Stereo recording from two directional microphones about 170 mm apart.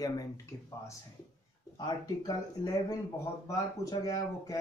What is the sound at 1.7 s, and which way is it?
Speech, 25° left (ahead or behind).